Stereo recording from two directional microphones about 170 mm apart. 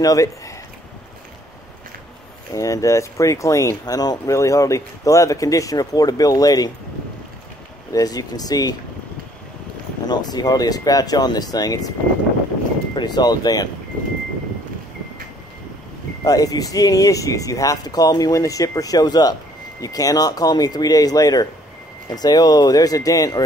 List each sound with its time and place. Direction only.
0.0 s speech: 20° left (ahead or behind)
2.5 s speech: 20° left (ahead or behind)
7.9 s speech: 20° left (ahead or behind)
10.0 s speech: 25° left (ahead or behind)
12.9 s speech: 25° left (ahead or behind)
16.3 s speech: 20° left (ahead or behind)